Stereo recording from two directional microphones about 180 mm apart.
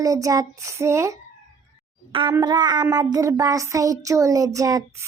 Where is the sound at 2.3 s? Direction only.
25° right (ahead or behind).